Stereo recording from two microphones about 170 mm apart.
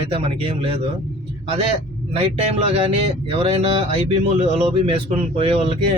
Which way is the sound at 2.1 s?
35° right (ahead or behind).